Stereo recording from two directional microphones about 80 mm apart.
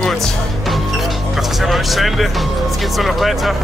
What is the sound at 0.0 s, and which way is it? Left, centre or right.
Music, centre.